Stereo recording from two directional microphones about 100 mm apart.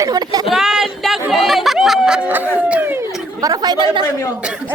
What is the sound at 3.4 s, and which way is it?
Chatter, 40° right (ahead or behind).